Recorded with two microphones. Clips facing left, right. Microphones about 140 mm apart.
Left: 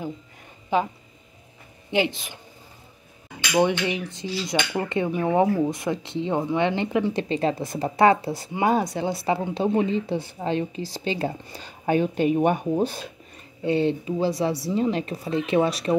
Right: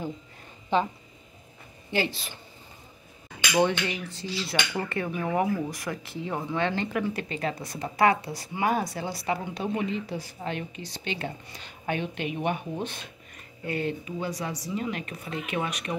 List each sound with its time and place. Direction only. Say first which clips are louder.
0.7 s speech: left 2 dB; 10° left (ahead or behind)
1.9 s dishes: left 5 dB; 20° left (ahead or behind)
10.9 s speech: left 7 dB; 30° left (ahead or behind)